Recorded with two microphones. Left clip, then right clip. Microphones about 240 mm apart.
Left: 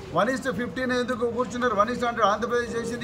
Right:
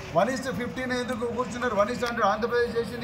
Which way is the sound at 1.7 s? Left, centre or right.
Left.